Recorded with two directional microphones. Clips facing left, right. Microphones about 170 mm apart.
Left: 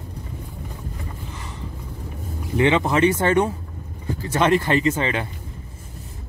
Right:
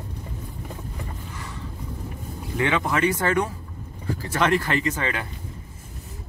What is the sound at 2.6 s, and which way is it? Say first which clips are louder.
Speech: left 5 dB; 25° left (ahead or behind).